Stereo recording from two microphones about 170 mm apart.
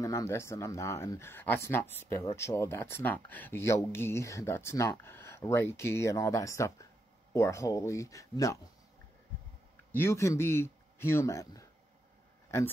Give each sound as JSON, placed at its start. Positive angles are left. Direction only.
{"t": 0.0, "sound": "speech", "side_deg": 20}
{"t": 9.9, "sound": "speech", "side_deg": 15}